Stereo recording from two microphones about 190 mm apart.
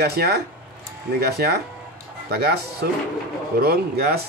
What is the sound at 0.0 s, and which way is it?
Speech, 55° right (ahead or behind).